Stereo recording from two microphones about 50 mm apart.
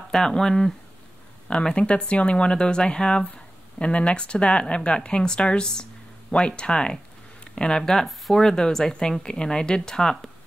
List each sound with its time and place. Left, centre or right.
0.1 s speech: centre